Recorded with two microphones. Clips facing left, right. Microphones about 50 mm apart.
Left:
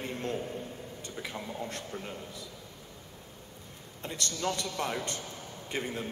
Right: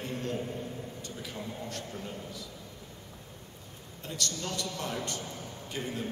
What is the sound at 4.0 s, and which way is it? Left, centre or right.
A man's voice, left.